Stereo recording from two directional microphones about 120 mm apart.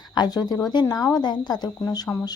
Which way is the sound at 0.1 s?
35° left (ahead or behind).